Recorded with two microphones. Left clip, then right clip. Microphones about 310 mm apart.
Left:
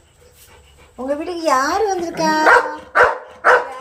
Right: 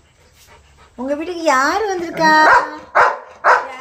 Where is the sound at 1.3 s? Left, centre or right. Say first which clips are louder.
Right 2 dB; centre.